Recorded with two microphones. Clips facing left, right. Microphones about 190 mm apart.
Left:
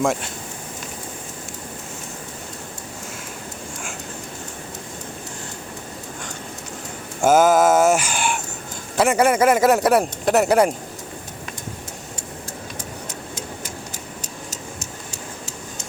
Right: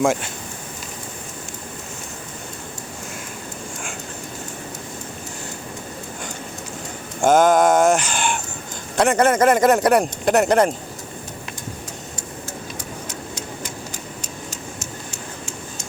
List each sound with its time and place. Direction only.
0.0 s speech: centre (ahead or behind)
7.2 s fowl: 5° left (ahead or behind)
9.0 s speech: 10° left (ahead or behind)
14.5 s a sound: 35° left (ahead or behind)